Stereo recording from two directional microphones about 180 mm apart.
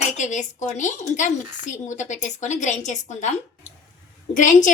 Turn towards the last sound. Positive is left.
turn(degrees=45)  # may be behind; listen again after turning